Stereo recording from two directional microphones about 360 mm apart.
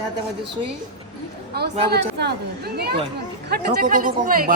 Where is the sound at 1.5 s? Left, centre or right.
Right.